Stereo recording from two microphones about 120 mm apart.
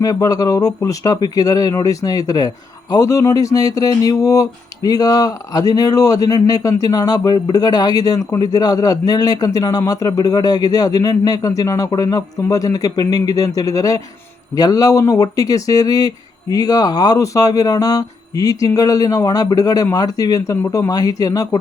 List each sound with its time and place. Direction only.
0.0 s a man's voice: 30° left (ahead or behind)